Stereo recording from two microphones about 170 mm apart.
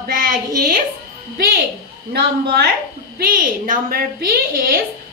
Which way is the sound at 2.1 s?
70° right (ahead or behind).